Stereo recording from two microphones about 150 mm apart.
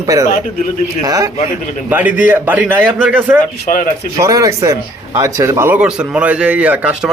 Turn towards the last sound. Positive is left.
turn(degrees=-10)  # may be behind; listen again after turning